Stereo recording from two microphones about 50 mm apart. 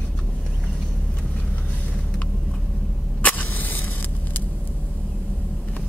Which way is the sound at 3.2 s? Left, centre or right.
Left.